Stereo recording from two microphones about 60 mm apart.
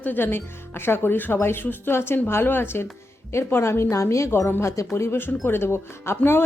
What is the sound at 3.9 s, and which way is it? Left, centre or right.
A woman's voice, left.